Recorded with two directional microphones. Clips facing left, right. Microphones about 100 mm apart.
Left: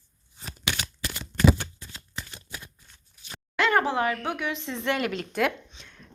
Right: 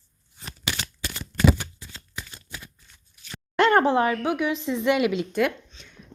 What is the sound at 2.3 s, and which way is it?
Shuffling cards, 5° left (ahead or behind).